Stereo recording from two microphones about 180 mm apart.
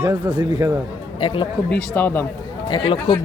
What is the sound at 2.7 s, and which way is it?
Speech, 25° left (ahead or behind).